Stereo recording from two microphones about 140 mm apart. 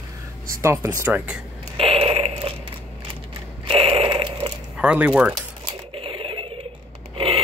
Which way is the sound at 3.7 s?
40° right (ahead or behind).